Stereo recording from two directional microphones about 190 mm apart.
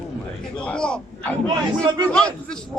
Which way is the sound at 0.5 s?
5° left (ahead or behind).